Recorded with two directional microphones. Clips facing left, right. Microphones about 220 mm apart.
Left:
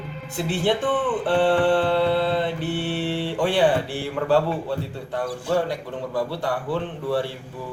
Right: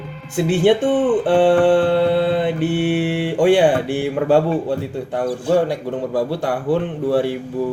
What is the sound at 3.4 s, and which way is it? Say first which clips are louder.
Music: right 7 dB; 50° right (ahead or behind).